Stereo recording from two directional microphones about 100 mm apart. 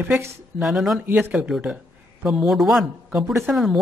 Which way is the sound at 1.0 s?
15° right (ahead or behind).